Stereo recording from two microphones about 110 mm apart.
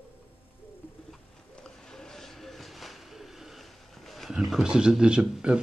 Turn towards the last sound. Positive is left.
turn(degrees=-10)  # may be behind; listen again after turning